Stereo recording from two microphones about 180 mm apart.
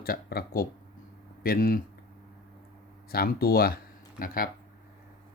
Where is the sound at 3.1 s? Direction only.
55° left (ahead or behind).